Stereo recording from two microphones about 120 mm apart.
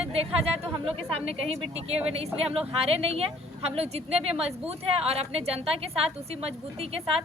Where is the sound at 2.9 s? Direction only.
55° right (ahead or behind).